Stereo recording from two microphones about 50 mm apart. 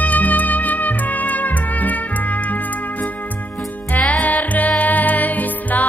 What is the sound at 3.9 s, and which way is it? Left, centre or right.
Music, left.